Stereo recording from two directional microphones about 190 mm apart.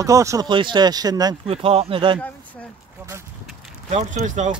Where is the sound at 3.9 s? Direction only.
35° right (ahead or behind).